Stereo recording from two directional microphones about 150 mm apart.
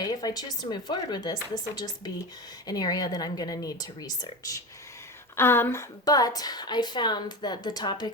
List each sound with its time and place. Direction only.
0.0 s a woman's voice: 25° left (ahead or behind)
5.4 s a woman's voice: 15° left (ahead or behind)